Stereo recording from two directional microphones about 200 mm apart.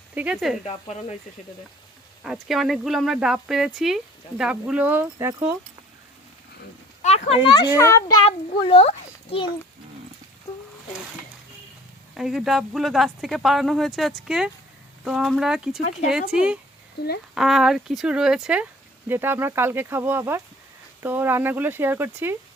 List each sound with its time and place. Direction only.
0.1 s speech: 5° right (ahead or behind)
0.6 s speech: 35° left (ahead or behind)
2.2 s speech: centre (ahead or behind)
7.0 s a sound: 35° left (ahead or behind)
7.5 s a child's voice: 20° left (ahead or behind)
8.3 s a child's voice: 30° left (ahead or behind)
10.5 s a sound: 15° left (ahead or behind)
12.1 s speech: centre (ahead or behind)